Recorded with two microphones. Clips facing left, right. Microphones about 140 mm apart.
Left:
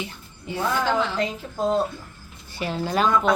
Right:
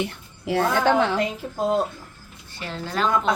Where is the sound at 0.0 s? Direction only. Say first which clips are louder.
Right 6 dB; 70° right (ahead or behind).